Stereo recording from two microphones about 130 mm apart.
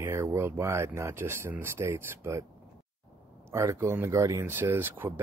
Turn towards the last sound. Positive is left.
turn(degrees=-15)  # may be behind; listen again after turning